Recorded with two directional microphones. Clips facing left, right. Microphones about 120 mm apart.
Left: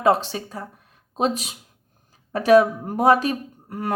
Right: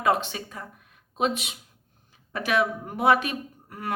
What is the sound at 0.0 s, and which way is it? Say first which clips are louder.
Speech: left 5 dB; 35° left (ahead or behind).